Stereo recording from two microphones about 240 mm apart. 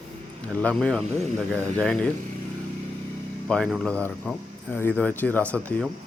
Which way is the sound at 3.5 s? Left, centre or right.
Centre.